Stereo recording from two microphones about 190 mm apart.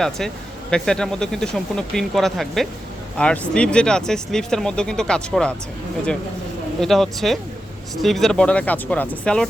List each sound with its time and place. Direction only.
0.7 s speech: 5° left (ahead or behind)
6.7 s speech: centre (ahead or behind)